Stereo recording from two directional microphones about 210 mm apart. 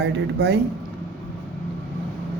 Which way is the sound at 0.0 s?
55° right (ahead or behind).